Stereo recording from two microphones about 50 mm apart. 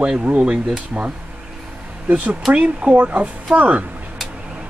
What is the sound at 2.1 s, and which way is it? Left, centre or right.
Speech, right.